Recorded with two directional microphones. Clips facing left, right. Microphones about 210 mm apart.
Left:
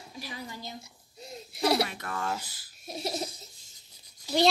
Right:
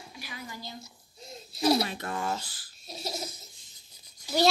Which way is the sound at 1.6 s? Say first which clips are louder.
Right 1 dB; 65° left (ahead or behind).